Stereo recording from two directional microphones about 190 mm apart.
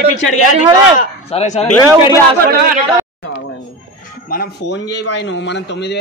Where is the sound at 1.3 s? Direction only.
35° left (ahead or behind).